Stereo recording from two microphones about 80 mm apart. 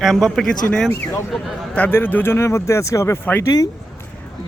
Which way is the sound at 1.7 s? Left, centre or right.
Left.